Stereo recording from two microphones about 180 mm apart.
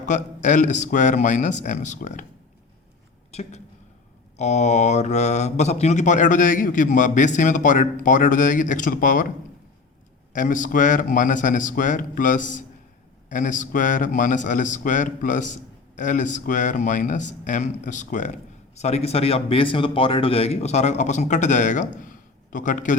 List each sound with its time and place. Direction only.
0.0 s a man's voice: 40° left (ahead or behind)
3.3 s a man's voice: 35° left (ahead or behind)
10.3 s a man's voice: 45° left (ahead or behind)
22.0 s a sound: 45° left (ahead or behind)